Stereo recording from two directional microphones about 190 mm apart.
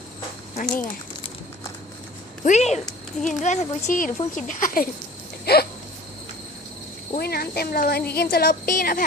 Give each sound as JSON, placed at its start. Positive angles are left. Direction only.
{"t": 0.5, "sound": "a sound", "side_deg": 40}
{"t": 2.4, "sound": "a woman's voice", "side_deg": 40}
{"t": 5.5, "sound": "speech", "side_deg": 55}
{"t": 7.2, "sound": "speech", "side_deg": 55}